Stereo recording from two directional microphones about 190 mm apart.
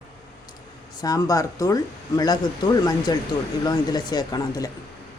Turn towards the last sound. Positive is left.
turn(degrees=20)  # may be behind; listen again after turning